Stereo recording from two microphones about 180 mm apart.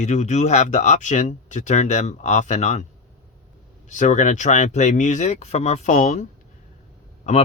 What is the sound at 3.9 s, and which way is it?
Speech, 40° left (ahead or behind).